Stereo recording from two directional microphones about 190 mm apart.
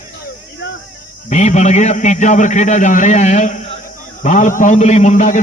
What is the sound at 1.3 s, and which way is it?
A man's voice, 35° left (ahead or behind).